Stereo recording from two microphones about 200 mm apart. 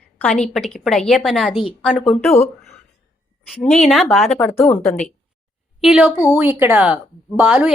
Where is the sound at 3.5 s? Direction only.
Centre (ahead or behind).